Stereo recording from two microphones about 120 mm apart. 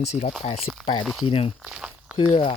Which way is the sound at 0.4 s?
55° left (ahead or behind).